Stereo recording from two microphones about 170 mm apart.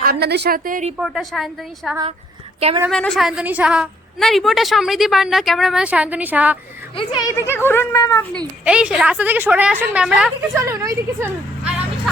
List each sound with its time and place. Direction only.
0.0 s a woman's voice: 65° right (ahead or behind)
0.9 s a woman's voice: centre (ahead or behind)
2.6 s a woman's voice: 35° right (ahead or behind)
2.9 s a woman's voice: 5° left (ahead or behind)
6.9 s speech: 25° left (ahead or behind)
8.6 s a woman's voice: 5° right (ahead or behind)
10.5 s a woman's voice: 15° right (ahead or behind)